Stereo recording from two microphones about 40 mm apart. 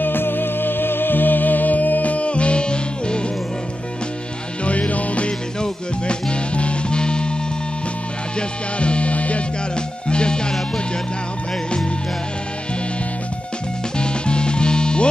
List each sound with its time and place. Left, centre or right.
0.0 s music: left
4.6 s music: left
5.6 s music: left
8.4 s music: left
10.0 s music: left
13.9 s music: left